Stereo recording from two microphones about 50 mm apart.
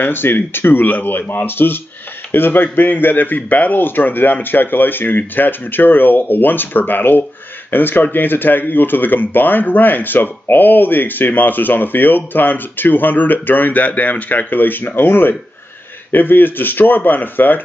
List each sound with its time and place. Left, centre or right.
0.0 s speech: left